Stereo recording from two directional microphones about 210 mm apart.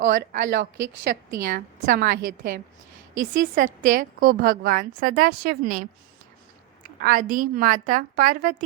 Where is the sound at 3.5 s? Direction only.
40° right (ahead or behind).